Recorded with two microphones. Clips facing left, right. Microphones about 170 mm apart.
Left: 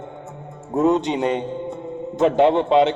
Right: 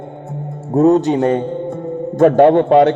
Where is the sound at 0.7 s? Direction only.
40° right (ahead or behind).